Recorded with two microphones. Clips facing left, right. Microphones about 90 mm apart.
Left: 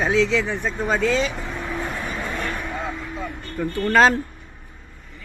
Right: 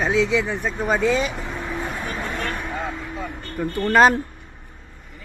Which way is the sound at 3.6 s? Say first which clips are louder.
Right 1 dB; 5° right (ahead or behind).